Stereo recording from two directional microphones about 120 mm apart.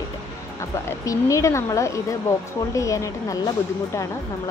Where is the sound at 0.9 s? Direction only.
25° left (ahead or behind).